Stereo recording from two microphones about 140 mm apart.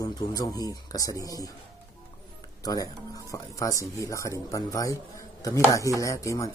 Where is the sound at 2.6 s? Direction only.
25° left (ahead or behind).